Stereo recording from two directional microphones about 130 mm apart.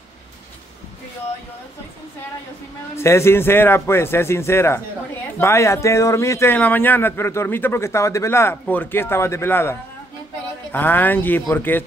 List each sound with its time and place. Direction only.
3.0 s a man's voice: 20° left (ahead or behind)